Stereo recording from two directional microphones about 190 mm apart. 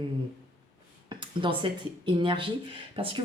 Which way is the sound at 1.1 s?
25° right (ahead or behind).